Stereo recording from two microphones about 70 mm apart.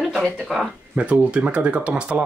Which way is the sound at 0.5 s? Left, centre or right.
Centre.